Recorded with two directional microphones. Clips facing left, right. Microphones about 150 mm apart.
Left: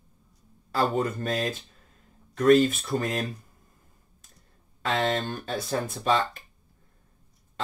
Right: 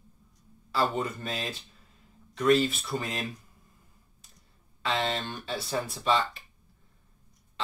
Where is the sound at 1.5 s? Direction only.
45° left (ahead or behind).